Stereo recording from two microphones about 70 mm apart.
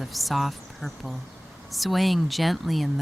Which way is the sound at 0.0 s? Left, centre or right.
Centre.